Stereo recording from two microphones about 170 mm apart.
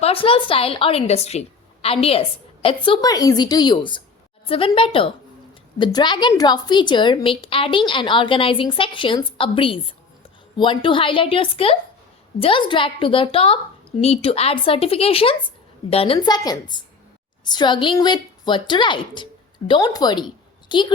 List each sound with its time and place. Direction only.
0.0 s a woman's voice: 35° left (ahead or behind)